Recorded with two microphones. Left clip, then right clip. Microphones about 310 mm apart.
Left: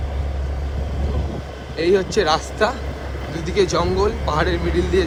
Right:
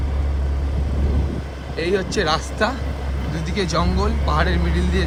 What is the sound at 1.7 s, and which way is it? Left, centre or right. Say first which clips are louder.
Speech: left 4 dB; centre.